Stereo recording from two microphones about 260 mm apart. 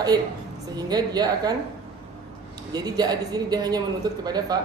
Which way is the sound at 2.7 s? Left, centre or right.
Centre.